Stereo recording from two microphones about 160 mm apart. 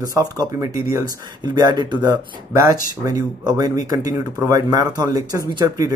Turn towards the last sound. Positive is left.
turn(degrees=-25)  # may be behind; listen again after turning